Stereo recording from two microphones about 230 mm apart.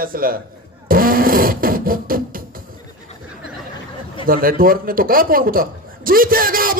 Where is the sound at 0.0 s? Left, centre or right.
Right.